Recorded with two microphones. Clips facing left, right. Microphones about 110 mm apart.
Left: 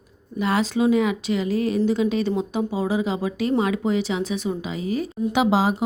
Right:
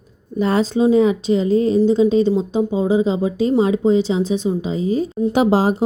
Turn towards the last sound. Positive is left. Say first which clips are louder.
# right 4 dB
turn(degrees=-40)  # may be behind; listen again after turning